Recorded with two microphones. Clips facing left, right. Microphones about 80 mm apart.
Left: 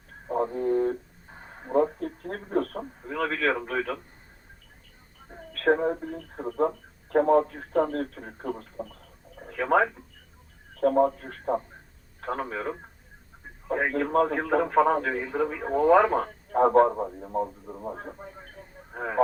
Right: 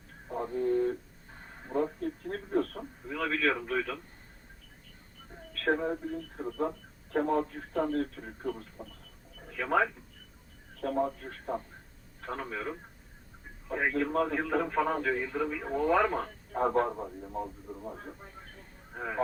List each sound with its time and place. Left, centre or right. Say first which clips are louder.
0.4 s a sound: left 2 dB; left
1.7 s a man's voice: left 7 dB; left
5.5 s a man's voice: left 6 dB; left